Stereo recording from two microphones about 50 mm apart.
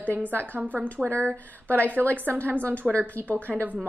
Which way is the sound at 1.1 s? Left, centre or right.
Right.